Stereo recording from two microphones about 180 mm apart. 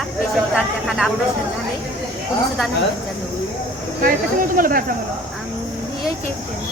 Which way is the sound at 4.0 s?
50° right (ahead or behind).